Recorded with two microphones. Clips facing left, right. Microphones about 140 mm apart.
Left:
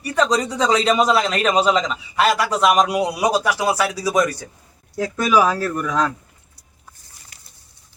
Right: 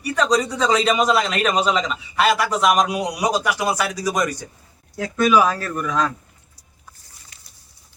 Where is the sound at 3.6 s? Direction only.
10° left (ahead or behind).